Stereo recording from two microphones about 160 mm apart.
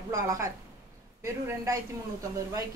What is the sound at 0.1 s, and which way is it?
A woman's voice, 20° right (ahead or behind).